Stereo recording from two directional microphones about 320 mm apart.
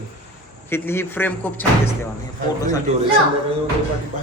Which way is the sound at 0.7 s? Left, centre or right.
Centre.